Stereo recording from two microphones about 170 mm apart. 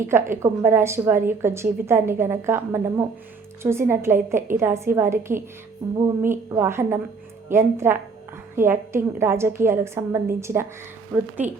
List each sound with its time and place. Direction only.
0.0 s a woman's voice: 15° right (ahead or behind)
5.8 s a sound: 20° right (ahead or behind)
6.6 s a woman's voice: 15° right (ahead or behind)